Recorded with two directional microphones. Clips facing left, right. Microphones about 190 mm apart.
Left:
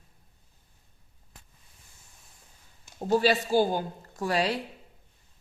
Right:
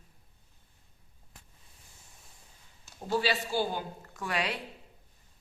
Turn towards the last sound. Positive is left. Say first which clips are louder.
# left 6 dB
turn(degrees=35)  # may be behind; listen again after turning